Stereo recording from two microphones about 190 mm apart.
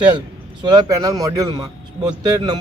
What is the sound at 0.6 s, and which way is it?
Speech, 20° right (ahead or behind).